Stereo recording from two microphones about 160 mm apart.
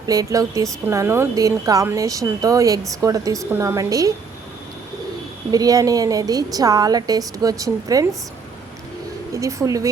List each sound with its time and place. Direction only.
0.0 s a woman's voice: 20° right (ahead or behind)
5.5 s a woman's voice: 25° right (ahead or behind)
9.3 s a woman's voice: 20° right (ahead or behind)